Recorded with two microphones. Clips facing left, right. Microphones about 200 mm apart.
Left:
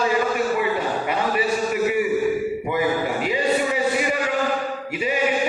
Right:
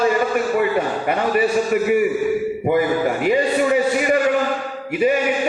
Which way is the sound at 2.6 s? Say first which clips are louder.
Right 7 dB; 50° right (ahead or behind).